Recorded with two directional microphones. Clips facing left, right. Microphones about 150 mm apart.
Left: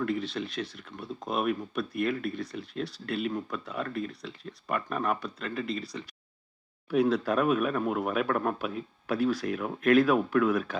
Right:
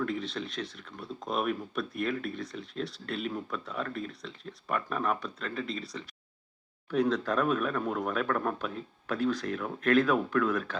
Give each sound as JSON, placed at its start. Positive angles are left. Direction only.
{"t": 0.0, "sound": "speech", "side_deg": 0}